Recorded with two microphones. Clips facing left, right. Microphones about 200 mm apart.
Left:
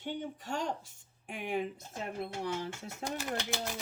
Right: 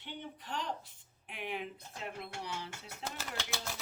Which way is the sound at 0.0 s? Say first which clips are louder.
Left 7 dB; 45° left (ahead or behind).